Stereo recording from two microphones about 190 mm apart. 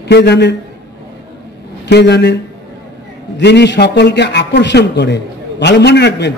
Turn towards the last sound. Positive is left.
turn(degrees=65)  # may be behind; listen again after turning